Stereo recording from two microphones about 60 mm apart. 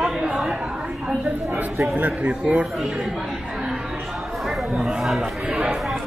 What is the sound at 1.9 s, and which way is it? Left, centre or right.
Speech, right.